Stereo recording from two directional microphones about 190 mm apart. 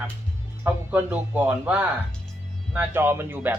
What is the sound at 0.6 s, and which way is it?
Speech, 10° right (ahead or behind).